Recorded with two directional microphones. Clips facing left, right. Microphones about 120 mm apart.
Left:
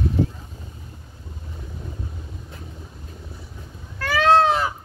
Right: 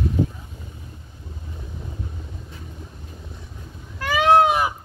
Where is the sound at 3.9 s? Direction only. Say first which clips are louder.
Right 1 dB; 15° right (ahead or behind).